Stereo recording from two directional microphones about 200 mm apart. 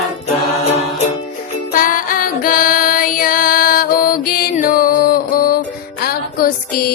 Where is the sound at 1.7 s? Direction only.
40° left (ahead or behind).